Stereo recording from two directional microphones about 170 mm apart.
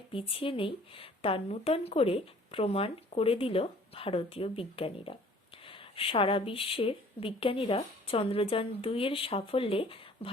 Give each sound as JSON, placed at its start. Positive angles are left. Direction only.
{"t": 0.1, "sound": "speech", "side_deg": 35}